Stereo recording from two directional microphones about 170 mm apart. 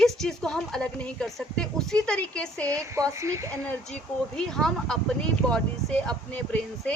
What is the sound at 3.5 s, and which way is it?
Speech, 10° left (ahead or behind).